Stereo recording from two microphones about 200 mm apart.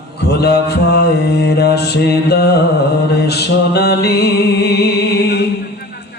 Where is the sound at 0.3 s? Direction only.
55° left (ahead or behind).